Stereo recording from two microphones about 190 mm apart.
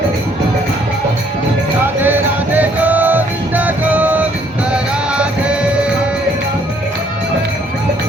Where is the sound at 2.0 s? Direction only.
10° right (ahead or behind).